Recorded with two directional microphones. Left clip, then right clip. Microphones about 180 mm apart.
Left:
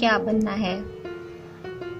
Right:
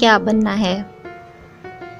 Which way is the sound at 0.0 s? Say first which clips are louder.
Right 8 dB; 40° right (ahead or behind).